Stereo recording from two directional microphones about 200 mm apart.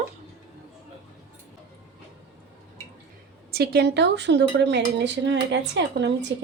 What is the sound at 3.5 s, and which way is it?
Speech, 50° right (ahead or behind).